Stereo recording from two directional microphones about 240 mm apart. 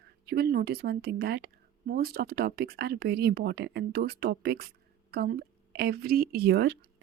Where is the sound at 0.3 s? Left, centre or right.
Right.